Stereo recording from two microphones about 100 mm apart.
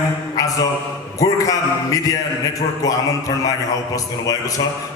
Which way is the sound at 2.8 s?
35° left (ahead or behind).